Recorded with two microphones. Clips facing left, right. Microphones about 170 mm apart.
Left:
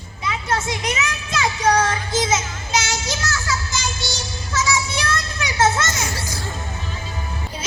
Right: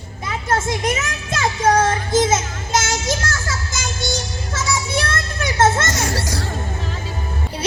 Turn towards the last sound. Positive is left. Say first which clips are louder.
# right 3 dB
turn(degrees=-50)  # may be behind; listen again after turning